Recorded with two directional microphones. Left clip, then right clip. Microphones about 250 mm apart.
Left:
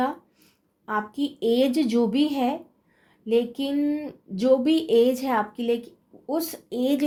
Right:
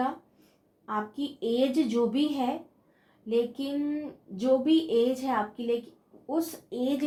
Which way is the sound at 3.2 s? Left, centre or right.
Left.